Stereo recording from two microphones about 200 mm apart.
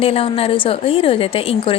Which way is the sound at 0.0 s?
30° left (ahead or behind).